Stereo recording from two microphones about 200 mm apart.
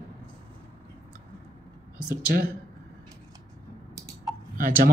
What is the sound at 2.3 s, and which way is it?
Speech, 50° right (ahead or behind).